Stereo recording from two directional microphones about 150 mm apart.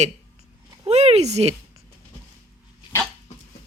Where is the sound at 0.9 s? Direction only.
45° right (ahead or behind).